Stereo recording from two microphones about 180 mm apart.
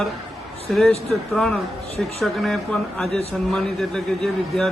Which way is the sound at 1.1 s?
5° left (ahead or behind).